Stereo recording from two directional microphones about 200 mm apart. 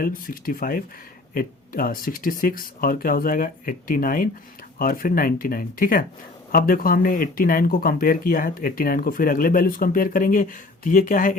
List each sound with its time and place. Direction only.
0.0 s speech: 45° left (ahead or behind)